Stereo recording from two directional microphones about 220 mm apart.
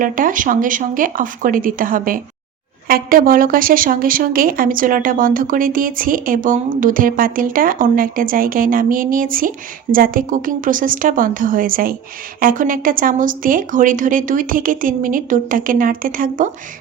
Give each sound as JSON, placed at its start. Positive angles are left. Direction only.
{"t": 0.0, "sound": "a woman's voice", "side_deg": -40}